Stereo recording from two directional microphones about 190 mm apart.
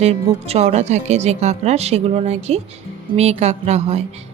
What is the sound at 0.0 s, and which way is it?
Speech, 30° right (ahead or behind).